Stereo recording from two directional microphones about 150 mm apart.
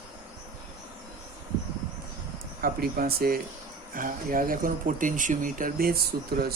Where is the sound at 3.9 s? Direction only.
65° right (ahead or behind).